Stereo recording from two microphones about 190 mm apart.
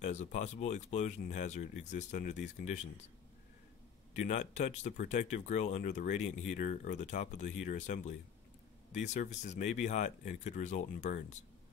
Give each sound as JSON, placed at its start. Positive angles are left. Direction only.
{"t": 0.0, "sound": "speech", "side_deg": 40}
{"t": 4.1, "sound": "speech", "side_deg": 40}